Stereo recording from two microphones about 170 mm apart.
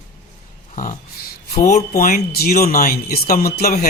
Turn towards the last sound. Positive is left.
turn(degrees=60)  # may be behind; listen again after turning